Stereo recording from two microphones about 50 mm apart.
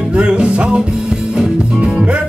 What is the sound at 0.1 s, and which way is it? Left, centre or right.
Music, right.